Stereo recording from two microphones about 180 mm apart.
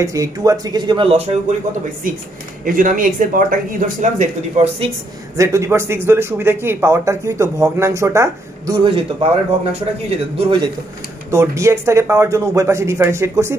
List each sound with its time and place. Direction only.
0.0 s speech: 20° right (ahead or behind)
2.6 s speech: 50° right (ahead or behind)
5.4 s speech: 15° right (ahead or behind)
11.2 s speech: 15° right (ahead or behind)